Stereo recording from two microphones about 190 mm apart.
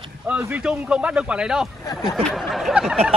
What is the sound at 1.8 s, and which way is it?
Speech, 20° left (ahead or behind).